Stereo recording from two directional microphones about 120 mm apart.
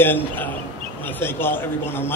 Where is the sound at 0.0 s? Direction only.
15° left (ahead or behind).